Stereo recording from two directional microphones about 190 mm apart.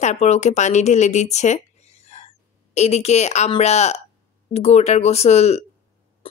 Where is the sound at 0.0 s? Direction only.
35° left (ahead or behind).